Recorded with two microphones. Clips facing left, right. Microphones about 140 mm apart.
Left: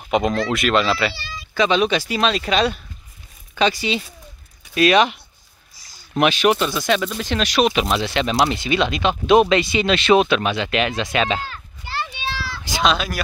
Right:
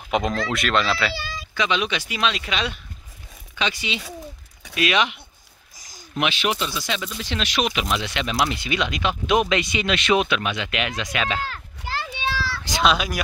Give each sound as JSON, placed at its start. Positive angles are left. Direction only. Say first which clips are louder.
{"t": 0.1, "sound": "speech", "louder": "left 4 dB", "side_deg": 0}
{"t": 1.5, "sound": "speech", "louder": "left 6 dB", "side_deg": 40}
{"t": 11.4, "sound": "a sound", "louder": "right 2 dB", "side_deg": -90}
{"t": 12.9, "sound": "speech", "louder": "left 1 dB", "side_deg": -15}